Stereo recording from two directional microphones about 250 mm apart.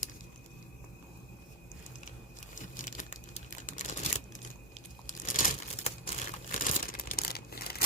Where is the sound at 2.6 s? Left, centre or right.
Left.